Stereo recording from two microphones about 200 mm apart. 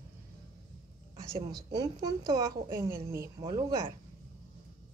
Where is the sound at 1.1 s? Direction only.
15° right (ahead or behind).